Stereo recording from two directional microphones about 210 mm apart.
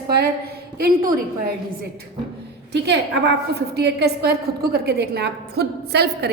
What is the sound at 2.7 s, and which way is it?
A woman's voice, 55° right (ahead or behind).